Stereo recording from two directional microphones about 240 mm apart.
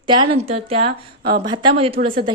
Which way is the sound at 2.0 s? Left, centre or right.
Right.